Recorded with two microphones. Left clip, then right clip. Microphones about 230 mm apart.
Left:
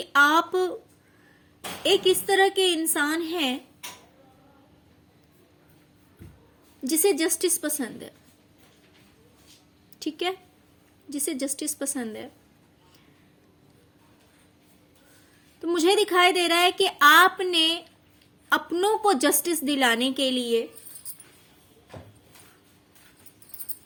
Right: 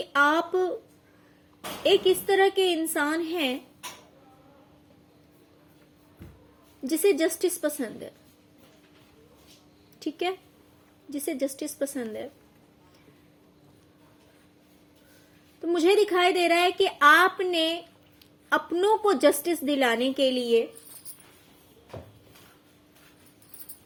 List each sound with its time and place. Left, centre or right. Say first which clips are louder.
0.0 s a woman's voice: left 3 dB; left
1.8 s a woman's voice: even; left
6.8 s a woman's voice: even; left
10.0 s a woman's voice: left 1 dB; left
15.6 s a woman's voice: even; left